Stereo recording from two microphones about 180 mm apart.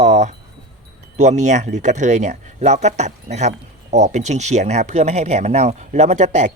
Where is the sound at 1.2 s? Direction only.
40° right (ahead or behind).